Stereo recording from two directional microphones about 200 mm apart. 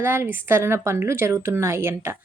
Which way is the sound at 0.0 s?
10° right (ahead or behind).